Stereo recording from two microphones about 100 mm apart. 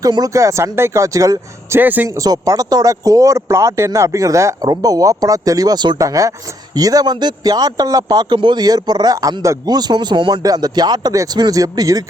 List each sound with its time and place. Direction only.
0.0 s speech: 40° right (ahead or behind)
1.8 s a man's voice: 15° right (ahead or behind)
2.0 s speech: 35° right (ahead or behind)
6.0 s speech: 35° right (ahead or behind)